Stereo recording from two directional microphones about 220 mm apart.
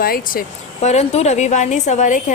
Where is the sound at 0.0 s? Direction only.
40° left (ahead or behind).